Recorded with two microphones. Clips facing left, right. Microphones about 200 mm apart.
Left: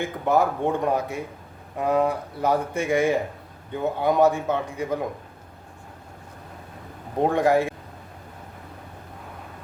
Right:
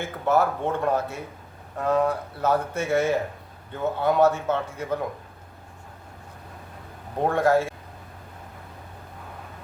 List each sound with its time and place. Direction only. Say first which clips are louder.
0.0 s speech: left 1 dB; 15° left (ahead or behind)
7.2 s speech: left 1 dB; 15° left (ahead or behind)